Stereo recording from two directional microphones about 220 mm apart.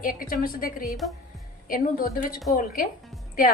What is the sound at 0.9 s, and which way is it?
Speech, centre (ahead or behind).